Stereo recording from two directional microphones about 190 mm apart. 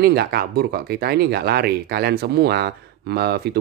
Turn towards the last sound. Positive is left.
turn(degrees=-60)  # may be behind; listen again after turning